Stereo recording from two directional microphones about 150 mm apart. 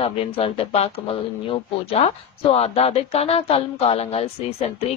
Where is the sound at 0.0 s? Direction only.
40° left (ahead or behind).